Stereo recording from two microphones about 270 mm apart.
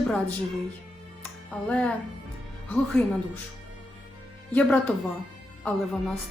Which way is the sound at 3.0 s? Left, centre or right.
Centre.